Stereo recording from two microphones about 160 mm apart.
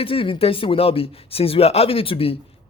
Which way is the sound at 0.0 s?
35° left (ahead or behind).